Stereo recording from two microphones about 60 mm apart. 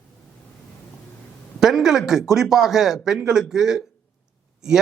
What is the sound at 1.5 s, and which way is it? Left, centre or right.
A man's voice, centre.